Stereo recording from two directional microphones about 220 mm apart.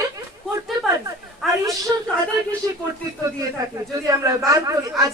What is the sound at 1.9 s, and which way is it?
Speech, 15° right (ahead or behind).